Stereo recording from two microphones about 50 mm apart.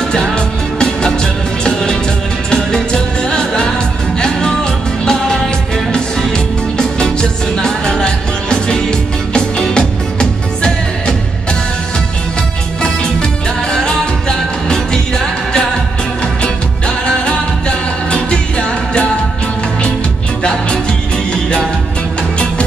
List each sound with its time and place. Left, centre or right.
0.7 s music: centre
12.8 s music: centre
16.8 s music: centre